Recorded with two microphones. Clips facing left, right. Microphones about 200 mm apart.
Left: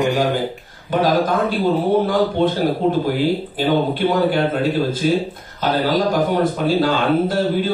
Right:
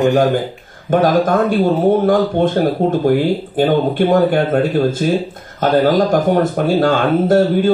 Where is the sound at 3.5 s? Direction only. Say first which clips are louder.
Right 7 dB; 50° right (ahead or behind).